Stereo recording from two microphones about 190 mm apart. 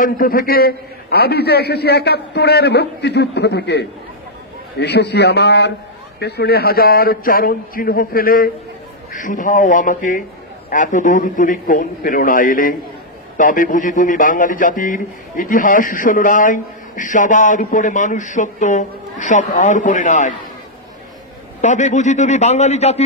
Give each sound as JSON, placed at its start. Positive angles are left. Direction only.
{"t": 0.0, "sound": "a man's voice", "side_deg": 50}
{"t": 21.5, "sound": "a man's voice", "side_deg": 40}